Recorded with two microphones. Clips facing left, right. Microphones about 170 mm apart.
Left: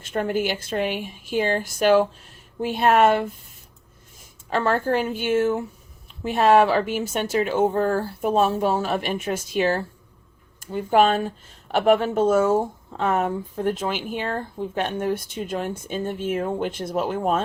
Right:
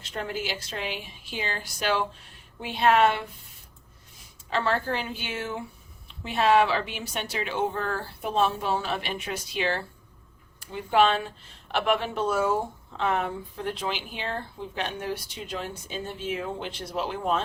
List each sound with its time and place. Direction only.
0.0 s speech: 50° left (ahead or behind)
4.4 s speech: 50° left (ahead or behind)